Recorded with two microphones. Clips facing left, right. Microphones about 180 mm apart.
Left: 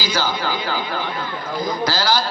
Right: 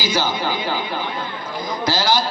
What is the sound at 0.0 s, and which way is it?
Speech, 20° right (ahead or behind).